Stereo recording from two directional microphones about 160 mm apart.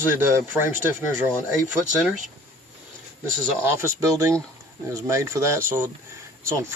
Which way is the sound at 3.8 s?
20° right (ahead or behind).